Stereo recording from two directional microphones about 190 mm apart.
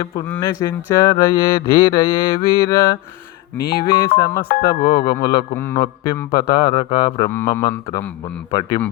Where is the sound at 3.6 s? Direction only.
55° left (ahead or behind).